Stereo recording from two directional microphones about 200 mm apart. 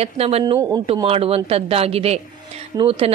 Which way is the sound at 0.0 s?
30° right (ahead or behind).